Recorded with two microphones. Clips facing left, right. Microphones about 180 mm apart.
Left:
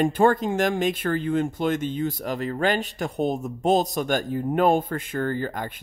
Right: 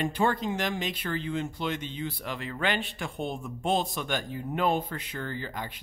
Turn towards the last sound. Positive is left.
turn(degrees=50)  # may be behind; listen again after turning